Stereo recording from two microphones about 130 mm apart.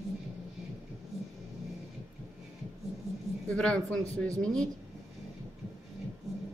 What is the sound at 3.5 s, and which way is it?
A man's voice, 10° left (ahead or behind).